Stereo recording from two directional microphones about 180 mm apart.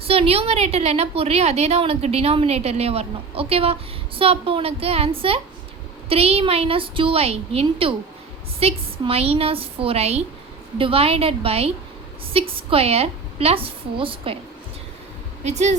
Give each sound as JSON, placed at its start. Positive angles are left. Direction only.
{"t": 0.0, "sound": "a woman's voice", "side_deg": -30}
{"t": 15.4, "sound": "a woman's voice", "side_deg": -40}